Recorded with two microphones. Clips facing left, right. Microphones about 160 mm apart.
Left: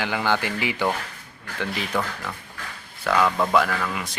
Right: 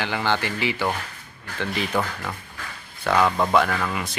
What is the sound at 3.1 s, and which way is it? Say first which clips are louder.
Speech: right 1 dB; 15° right (ahead or behind).